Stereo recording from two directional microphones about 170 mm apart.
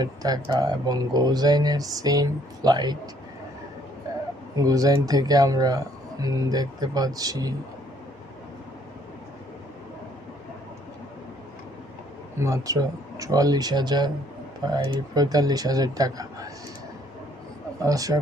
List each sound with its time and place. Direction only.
0.0 s speech: 20° right (ahead or behind)
4.5 s speech: 20° right (ahead or behind)
12.4 s speech: 20° right (ahead or behind)
17.8 s speech: 20° right (ahead or behind)